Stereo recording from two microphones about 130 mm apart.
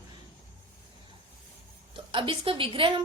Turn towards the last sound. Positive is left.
turn(degrees=-40)  # may be behind; listen again after turning